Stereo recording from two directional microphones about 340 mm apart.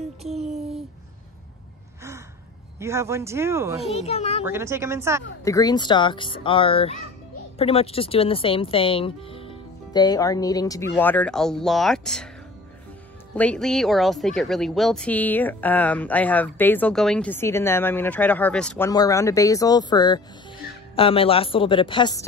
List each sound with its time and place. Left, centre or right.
0.3 s speech: centre
2.8 s speech: centre
3.9 s speech: centre
4.5 s speech: centre
5.4 s speech: centre
13.3 s speech: centre